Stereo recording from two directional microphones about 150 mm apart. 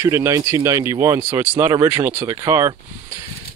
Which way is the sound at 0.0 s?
20° right (ahead or behind).